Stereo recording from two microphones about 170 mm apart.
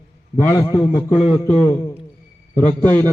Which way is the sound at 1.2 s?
40° left (ahead or behind).